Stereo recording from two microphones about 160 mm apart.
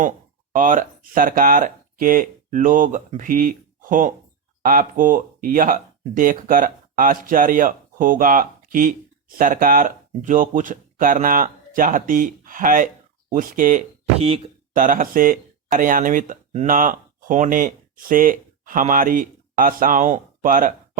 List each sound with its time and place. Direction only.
0.5 s speech: 55° right (ahead or behind)
14.2 s speech: 35° right (ahead or behind)
14.8 s speech: 55° right (ahead or behind)